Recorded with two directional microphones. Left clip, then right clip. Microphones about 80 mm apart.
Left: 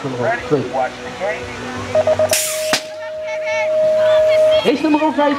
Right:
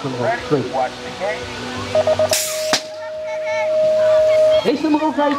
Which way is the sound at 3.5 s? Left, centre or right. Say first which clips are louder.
Left 1 dB; left.